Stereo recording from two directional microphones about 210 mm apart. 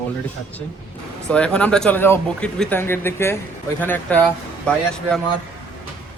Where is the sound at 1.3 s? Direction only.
5° left (ahead or behind).